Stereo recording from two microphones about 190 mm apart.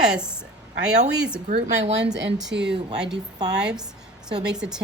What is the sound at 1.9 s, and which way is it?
Speech, 65° right (ahead or behind).